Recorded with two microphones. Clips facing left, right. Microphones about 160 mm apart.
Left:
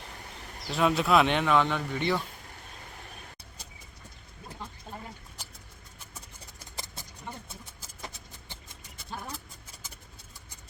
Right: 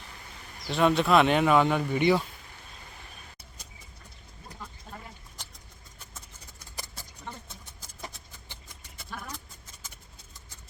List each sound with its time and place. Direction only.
0.7 s speech: centre (ahead or behind)
6.7 s a sound: 20° left (ahead or behind)
7.3 s vehicle: 10° left (ahead or behind)
8.7 s clip-clop: 25° left (ahead or behind)